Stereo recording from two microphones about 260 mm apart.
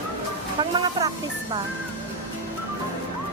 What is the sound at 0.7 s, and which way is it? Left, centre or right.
Speech, centre.